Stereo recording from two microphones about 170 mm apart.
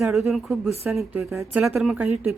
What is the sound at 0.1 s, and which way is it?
Speech, centre (ahead or behind).